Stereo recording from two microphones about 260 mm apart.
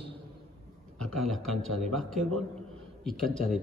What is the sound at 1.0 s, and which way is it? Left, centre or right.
A man's voice, centre.